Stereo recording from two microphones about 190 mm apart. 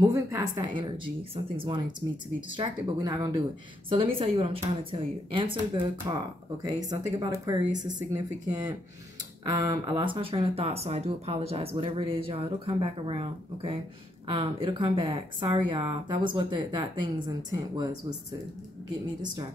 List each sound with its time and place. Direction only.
0.0 s speech: 20° right (ahead or behind)